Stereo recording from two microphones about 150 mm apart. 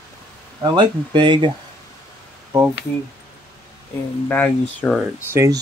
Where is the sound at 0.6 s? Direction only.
30° right (ahead or behind).